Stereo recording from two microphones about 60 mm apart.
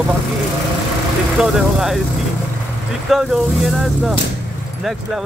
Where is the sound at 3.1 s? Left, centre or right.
Centre.